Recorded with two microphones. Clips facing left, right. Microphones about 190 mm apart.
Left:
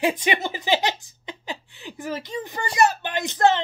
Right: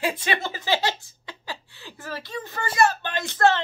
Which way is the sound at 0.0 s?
15° left (ahead or behind).